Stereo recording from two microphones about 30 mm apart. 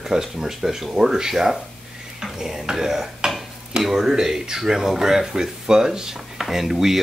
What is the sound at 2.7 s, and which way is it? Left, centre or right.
Speech, centre.